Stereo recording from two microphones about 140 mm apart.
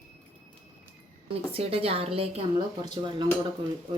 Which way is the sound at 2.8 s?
30° right (ahead or behind).